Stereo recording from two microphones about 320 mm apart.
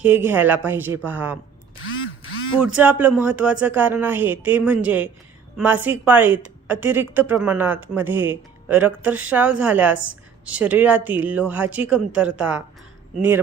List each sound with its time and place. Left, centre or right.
0.0 s a woman's voice: centre
1.8 s a sound: left
2.7 s a woman's voice: centre